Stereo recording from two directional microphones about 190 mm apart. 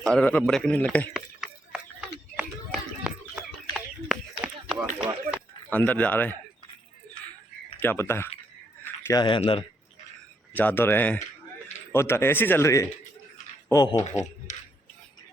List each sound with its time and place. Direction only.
0.0 s speech: 5° left (ahead or behind)
1.1 s a sound: 5° right (ahead or behind)
5.7 s speech: 10° left (ahead or behind)
7.8 s speech: 10° left (ahead or behind)
9.0 s speech: 25° left (ahead or behind)
10.5 s speech: 10° left (ahead or behind)